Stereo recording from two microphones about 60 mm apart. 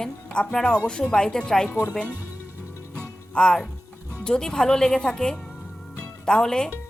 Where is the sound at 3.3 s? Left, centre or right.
Centre.